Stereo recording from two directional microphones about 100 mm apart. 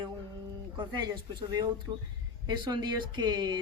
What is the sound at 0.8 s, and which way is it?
Speech, 45° right (ahead or behind).